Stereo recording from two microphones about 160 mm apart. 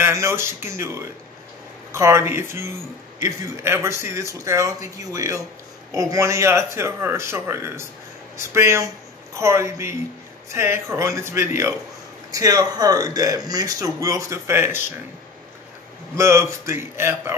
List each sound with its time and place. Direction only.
0.0 s speech: 15° right (ahead or behind)
16.2 s speech: 15° right (ahead or behind)